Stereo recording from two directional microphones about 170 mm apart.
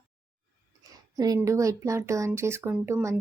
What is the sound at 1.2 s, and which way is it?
Speech, 20° right (ahead or behind).